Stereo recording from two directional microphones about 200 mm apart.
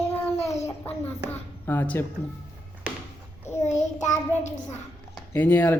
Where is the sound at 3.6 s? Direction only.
35° left (ahead or behind).